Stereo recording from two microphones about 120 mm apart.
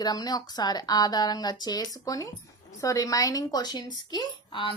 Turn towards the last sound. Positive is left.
turn(degrees=45)  # may be behind; listen again after turning